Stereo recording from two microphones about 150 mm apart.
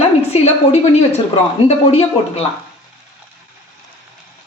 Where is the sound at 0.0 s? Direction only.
45° left (ahead or behind).